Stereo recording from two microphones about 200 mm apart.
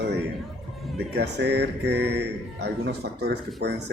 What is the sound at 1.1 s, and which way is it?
Speech, 55° right (ahead or behind).